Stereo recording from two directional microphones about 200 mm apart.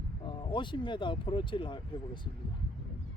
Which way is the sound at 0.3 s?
25° left (ahead or behind).